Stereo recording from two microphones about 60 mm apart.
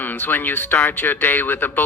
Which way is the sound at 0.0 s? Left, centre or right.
Left.